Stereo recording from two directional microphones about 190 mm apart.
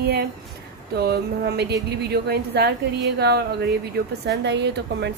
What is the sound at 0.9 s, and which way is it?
A woman's voice, 55° right (ahead or behind).